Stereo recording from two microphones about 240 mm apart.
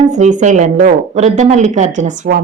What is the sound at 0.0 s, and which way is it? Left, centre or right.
Speech, right.